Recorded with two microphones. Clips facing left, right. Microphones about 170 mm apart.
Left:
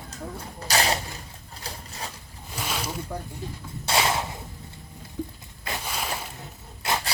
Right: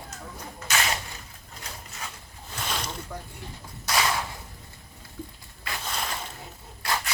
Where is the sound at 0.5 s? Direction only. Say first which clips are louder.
Left 4 dB; 35° left (ahead or behind).